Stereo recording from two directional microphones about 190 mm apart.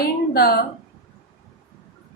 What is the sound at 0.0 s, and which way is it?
Speech, 55° left (ahead or behind).